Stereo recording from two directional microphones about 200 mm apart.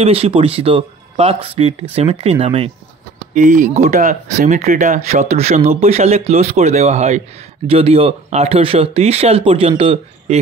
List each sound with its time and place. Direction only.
0.0 s speech: 30° right (ahead or behind)
3.3 s speech: 40° right (ahead or behind)